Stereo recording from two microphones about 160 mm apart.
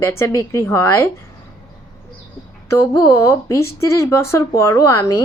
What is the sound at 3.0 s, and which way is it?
Speech, 15° left (ahead or behind).